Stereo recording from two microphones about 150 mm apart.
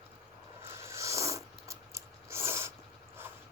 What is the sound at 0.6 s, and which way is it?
Purr, 15° right (ahead or behind).